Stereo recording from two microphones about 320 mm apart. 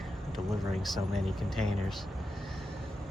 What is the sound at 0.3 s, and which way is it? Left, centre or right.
Speech, centre.